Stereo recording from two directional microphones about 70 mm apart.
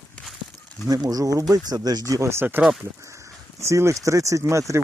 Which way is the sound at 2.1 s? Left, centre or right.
Right.